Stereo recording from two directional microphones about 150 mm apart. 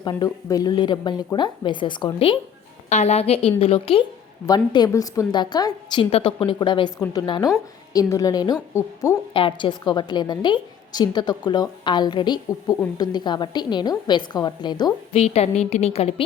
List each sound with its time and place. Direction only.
0.0 s a woman's voice: 30° left (ahead or behind)
4.4 s a woman's voice: 30° left (ahead or behind)
6.1 s a woman's voice: 40° left (ahead or behind); by 9.1 s 20° left (ahead or behind)
9.3 s a woman's voice: 35° left (ahead or behind)
15.1 s a woman's voice: 45° left (ahead or behind)